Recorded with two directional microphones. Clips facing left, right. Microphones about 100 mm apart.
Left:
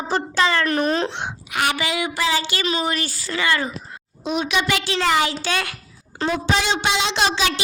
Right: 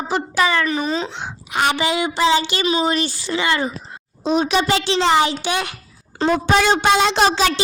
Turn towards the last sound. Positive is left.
turn(degrees=-40)  # may be behind; listen again after turning